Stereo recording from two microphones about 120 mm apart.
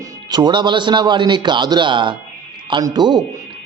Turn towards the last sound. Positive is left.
turn(degrees=-35)  # may be behind; listen again after turning